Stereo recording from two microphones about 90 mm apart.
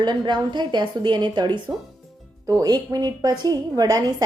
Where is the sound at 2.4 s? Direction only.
45° right (ahead or behind).